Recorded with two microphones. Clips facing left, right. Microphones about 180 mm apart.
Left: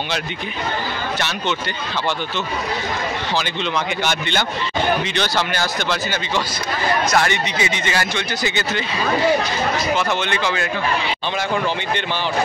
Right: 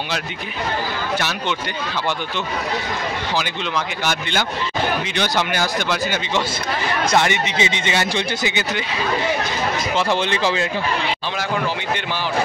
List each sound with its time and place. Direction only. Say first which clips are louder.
3.7 s speech: even; 5° right (ahead or behind)
7.1 s speech: right 1 dB; 20° right (ahead or behind)
8.5 s speech: left 1 dB; 15° right (ahead or behind)
9.9 s speech: right 1 dB; 30° right (ahead or behind)